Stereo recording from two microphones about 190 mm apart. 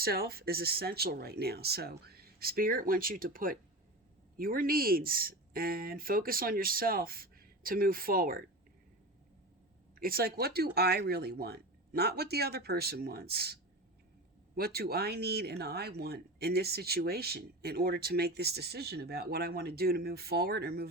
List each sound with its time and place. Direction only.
0.0 s speech: 55° right (ahead or behind)
9.9 s speech: 50° right (ahead or behind)